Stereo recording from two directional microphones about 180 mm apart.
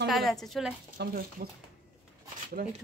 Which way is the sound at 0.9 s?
55° right (ahead or behind).